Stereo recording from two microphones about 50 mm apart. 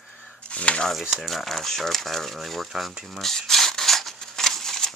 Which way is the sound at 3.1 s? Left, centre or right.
Centre.